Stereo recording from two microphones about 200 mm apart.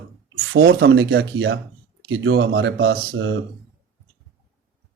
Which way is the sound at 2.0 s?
80° right.